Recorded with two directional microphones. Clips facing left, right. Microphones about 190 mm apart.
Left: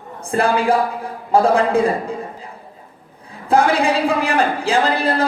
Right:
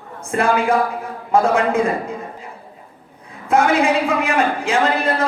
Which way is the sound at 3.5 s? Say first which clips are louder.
Even; 35° left (ahead or behind).